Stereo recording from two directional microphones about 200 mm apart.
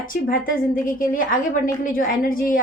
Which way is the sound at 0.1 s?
45° left (ahead or behind).